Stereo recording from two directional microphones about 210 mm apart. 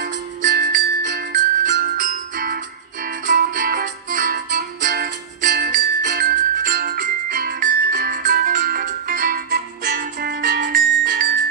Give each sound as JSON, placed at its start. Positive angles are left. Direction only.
{"t": 0.0, "sound": "music", "side_deg": -40}
{"t": 0.6, "sound": "music", "side_deg": -50}